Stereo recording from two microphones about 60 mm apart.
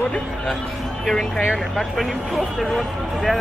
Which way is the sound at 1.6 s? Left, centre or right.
Centre.